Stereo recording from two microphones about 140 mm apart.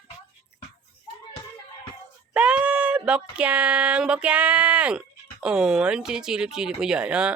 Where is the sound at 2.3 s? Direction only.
10° right (ahead or behind).